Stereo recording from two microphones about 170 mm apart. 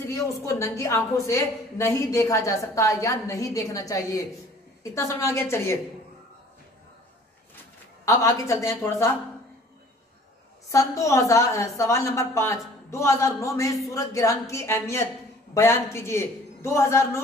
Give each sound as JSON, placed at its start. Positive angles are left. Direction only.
{"t": 0.0, "sound": "a woman's voice", "side_deg": 15}
{"t": 8.0, "sound": "a woman's voice", "side_deg": 20}
{"t": 10.7, "sound": "a woman's voice", "side_deg": 20}